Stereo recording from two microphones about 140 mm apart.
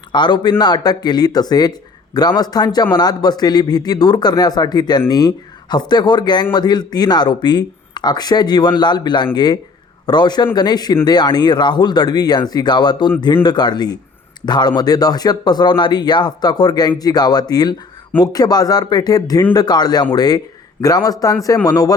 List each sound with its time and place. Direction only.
0.1 s a man's voice: 35° left (ahead or behind)